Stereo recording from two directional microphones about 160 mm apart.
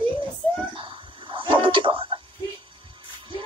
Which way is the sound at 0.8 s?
30° right (ahead or behind).